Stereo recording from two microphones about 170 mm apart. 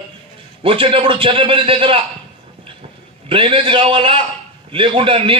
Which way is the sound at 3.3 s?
30° right (ahead or behind).